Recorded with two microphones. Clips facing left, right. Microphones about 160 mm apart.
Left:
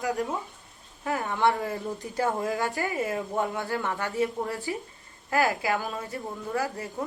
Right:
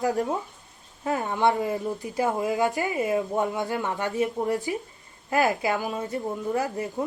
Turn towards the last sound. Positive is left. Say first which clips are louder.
# right 3 dB
turn(degrees=-20)  # may be behind; listen again after turning